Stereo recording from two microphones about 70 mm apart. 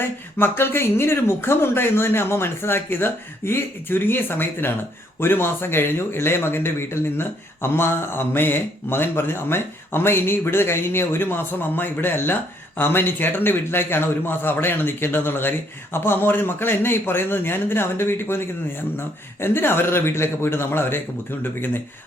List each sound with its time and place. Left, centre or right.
0.0 s speech: left